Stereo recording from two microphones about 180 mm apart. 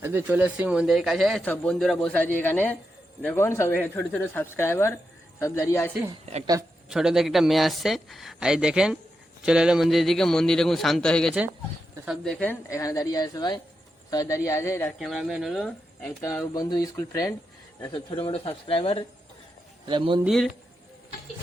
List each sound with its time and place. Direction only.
0.0 s speech: 15° right (ahead or behind); by 5.9 s 15° left (ahead or behind)
6.4 s speech: 20° right (ahead or behind)
6.9 s speech: 5° right (ahead or behind); by 14.9 s 15° left (ahead or behind)
14.9 s speech: centre (ahead or behind)
16.2 s speech: 20° left (ahead or behind)
19.8 s speech: 25° right (ahead or behind)
20.2 s speech: centre (ahead or behind)